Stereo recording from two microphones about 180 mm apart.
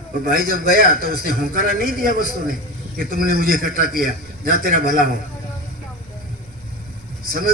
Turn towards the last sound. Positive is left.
turn(degrees=-55)  # may be behind; listen again after turning